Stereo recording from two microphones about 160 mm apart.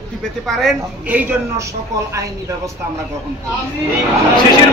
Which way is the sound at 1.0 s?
10° right (ahead or behind).